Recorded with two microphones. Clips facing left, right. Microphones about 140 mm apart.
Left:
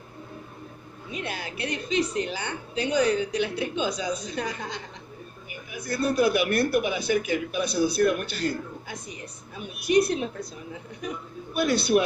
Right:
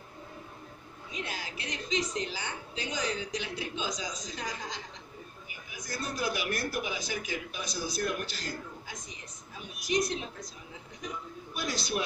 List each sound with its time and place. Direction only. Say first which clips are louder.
1.1 s a woman's voice: left 6 dB; 60° left (ahead or behind)